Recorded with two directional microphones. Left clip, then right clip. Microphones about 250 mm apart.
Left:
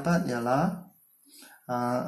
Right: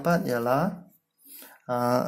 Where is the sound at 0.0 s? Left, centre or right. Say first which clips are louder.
Right 4 dB; right.